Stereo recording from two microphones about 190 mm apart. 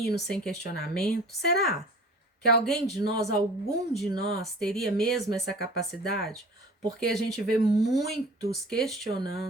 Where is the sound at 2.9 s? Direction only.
20° right (ahead or behind).